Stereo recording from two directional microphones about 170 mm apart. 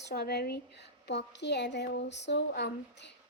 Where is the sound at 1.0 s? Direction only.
90° left.